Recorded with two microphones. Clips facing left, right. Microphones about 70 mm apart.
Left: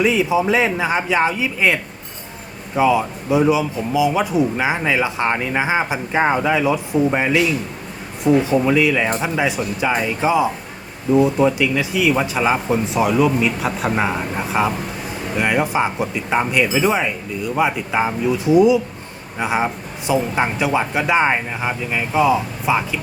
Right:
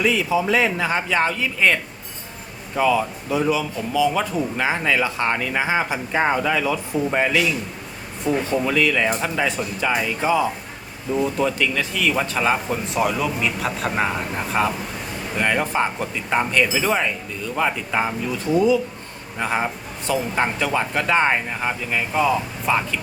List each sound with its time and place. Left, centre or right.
0.0 s a man's voice: centre